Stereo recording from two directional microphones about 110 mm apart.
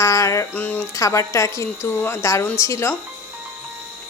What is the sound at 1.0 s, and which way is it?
Speech, 25° left (ahead or behind).